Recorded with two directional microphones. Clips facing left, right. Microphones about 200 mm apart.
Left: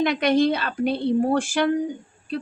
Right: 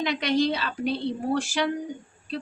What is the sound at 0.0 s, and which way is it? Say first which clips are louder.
A woman's voice: left 5 dB; 55° left (ahead or behind).